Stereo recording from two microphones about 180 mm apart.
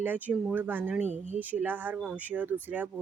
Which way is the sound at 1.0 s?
40° right (ahead or behind).